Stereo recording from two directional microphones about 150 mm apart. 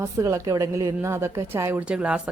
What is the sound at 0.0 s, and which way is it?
A woman's voice, 20° right (ahead or behind).